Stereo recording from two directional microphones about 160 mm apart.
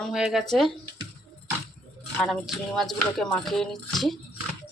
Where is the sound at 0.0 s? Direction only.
5° right (ahead or behind).